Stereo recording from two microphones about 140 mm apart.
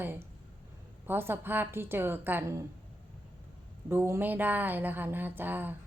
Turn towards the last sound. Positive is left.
turn(degrees=-15)  # may be behind; listen again after turning